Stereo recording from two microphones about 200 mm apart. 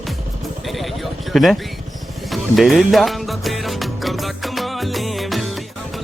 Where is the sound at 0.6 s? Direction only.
Centre (ahead or behind).